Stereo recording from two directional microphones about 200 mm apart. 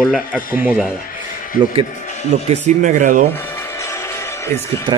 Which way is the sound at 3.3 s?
10° left (ahead or behind).